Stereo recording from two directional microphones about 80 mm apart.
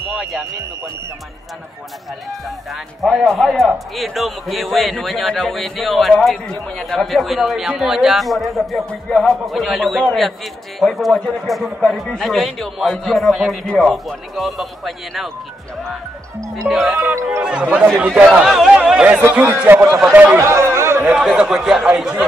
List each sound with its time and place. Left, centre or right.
3.0 s a man's voice: centre
16.6 s a man's voice: centre
16.9 s speech: right
17.4 s speech: centre
19.7 s speech: right
21.0 s speech: centre